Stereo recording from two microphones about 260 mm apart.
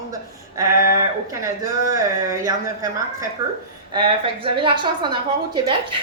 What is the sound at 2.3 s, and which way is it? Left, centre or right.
A woman's voice, centre.